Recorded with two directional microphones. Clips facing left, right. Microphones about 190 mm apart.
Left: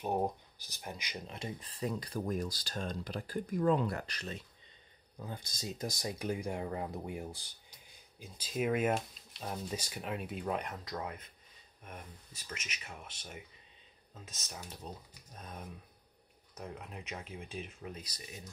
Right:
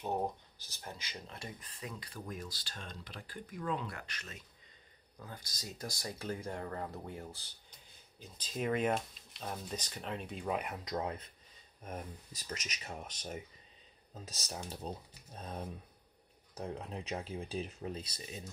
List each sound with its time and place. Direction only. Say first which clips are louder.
0.0 s speech: left 2 dB; 15° left (ahead or behind)
1.6 s speech: left 9 dB; 35° left (ahead or behind)
5.1 s speech: left 5 dB; 25° left (ahead or behind); by 10.8 s 5° right (ahead or behind)
10.8 s speech: right 3 dB; 20° right (ahead or behind)
11.8 s speech: right 6 dB; 35° right (ahead or behind)